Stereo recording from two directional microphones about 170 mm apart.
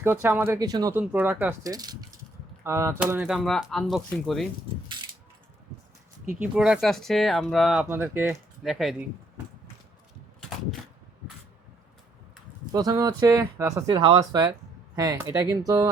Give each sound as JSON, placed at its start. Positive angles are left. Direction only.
{"t": 0.0, "sound": "speech", "side_deg": -10}
{"t": 0.9, "sound": "speech", "side_deg": -10}
{"t": 3.0, "sound": "speech", "side_deg": -5}
{"t": 6.4, "sound": "speech", "side_deg": -5}
{"t": 7.9, "sound": "speech", "side_deg": -15}
{"t": 8.6, "sound": "speech", "side_deg": 0}
{"t": 12.7, "sound": "speech", "side_deg": -25}
{"t": 13.9, "sound": "speech", "side_deg": -30}